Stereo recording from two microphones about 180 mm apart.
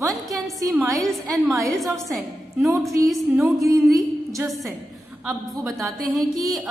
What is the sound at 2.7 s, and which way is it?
Speech, centre (ahead or behind).